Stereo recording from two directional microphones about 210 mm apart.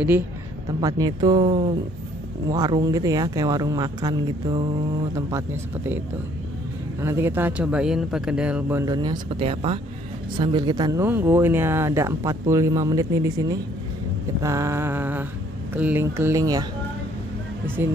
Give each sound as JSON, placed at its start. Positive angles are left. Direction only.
{"t": 0.7, "sound": "speech", "side_deg": -15}
{"t": 7.0, "sound": "speech", "side_deg": -10}